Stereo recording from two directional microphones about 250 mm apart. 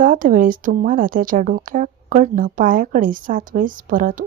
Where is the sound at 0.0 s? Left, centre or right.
Right.